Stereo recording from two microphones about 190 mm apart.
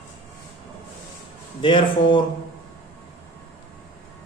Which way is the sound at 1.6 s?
25° left (ahead or behind).